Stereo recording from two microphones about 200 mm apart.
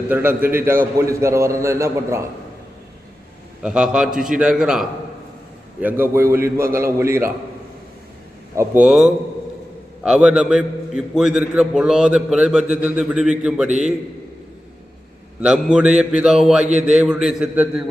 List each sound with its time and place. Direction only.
0.1 s a man's voice: 10° right (ahead or behind)
3.6 s a man's voice: 5° right (ahead or behind)
8.5 s a man's voice: 5° right (ahead or behind)
15.4 s a man's voice: 5° right (ahead or behind)